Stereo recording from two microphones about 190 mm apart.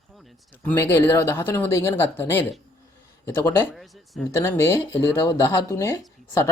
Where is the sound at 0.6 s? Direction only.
10° left (ahead or behind).